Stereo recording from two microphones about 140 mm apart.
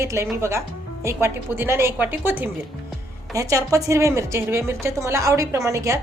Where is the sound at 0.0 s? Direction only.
20° right (ahead or behind).